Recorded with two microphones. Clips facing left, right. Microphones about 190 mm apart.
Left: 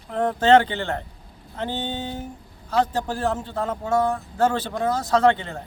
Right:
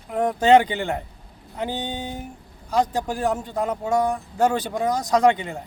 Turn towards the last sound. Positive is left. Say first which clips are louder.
# even
turn(degrees=-15)  # may be behind; listen again after turning